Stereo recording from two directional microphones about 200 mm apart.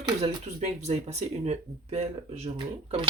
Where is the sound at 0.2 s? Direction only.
30° right (ahead or behind).